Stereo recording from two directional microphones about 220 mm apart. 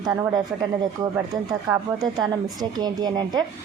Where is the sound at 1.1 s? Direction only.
15° right (ahead or behind).